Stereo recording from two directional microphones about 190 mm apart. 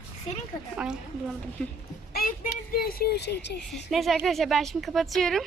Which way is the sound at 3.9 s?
Centre (ahead or behind).